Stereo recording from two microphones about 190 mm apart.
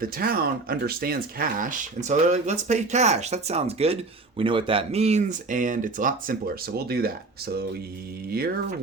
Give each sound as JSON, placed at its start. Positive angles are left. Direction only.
{"t": 0.0, "sound": "speech", "side_deg": -50}